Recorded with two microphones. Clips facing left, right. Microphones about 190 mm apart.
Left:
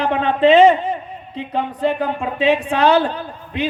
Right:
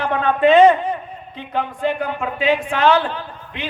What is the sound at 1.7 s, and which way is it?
A man's voice, 35° left (ahead or behind).